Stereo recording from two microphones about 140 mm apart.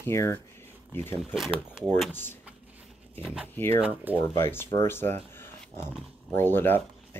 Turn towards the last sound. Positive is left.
turn(degrees=15)  # may be behind; listen again after turning